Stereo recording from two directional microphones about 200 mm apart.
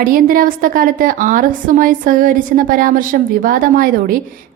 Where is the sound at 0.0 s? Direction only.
45° right (ahead or behind).